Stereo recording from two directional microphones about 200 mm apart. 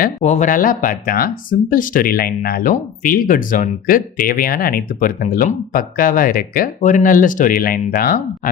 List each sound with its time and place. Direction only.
0.0 s speech: 35° left (ahead or behind)